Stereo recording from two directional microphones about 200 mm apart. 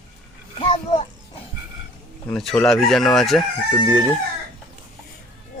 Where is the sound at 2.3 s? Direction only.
5° left (ahead or behind).